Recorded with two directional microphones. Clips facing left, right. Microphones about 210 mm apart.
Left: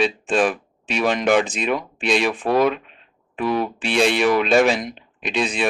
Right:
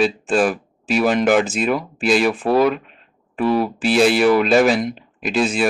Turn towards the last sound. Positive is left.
turn(degrees=0)  # may be behind; listen again after turning